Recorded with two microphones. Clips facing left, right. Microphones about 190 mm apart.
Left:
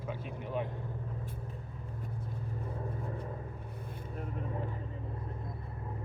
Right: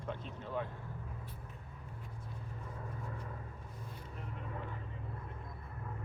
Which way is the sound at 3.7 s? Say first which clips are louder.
Left 5 dB; 55° left (ahead or behind).